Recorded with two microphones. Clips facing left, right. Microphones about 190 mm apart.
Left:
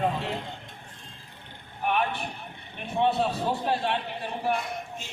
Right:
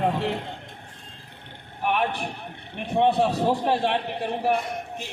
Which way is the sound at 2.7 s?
65° right (ahead or behind).